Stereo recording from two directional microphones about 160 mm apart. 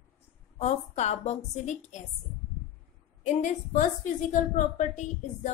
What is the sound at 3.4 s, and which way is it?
A woman's voice, 50° left (ahead or behind).